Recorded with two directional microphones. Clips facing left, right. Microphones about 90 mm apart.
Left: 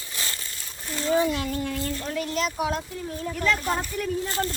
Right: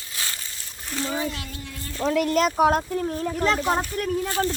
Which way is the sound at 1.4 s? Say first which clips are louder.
Left 9 dB; 50° left (ahead or behind).